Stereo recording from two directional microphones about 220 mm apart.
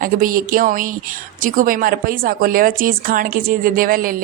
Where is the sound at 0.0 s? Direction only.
40° right (ahead or behind).